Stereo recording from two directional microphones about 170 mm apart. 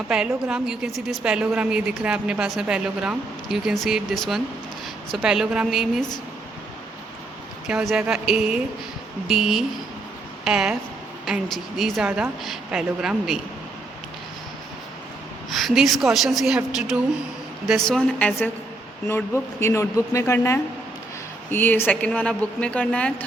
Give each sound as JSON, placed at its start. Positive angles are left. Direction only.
{"t": 0.1, "sound": "a woman's voice", "side_deg": -5}
{"t": 7.7, "sound": "a woman's voice", "side_deg": -5}
{"t": 15.5, "sound": "a woman's voice", "side_deg": 0}